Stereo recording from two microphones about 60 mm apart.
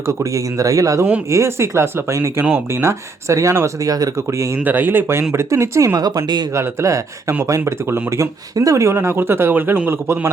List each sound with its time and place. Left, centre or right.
0.1 s speech: right
1.3 s speech: right
3.8 s speech: right
4.5 s speech: right
6.5 s speech: right
8.1 s speech: right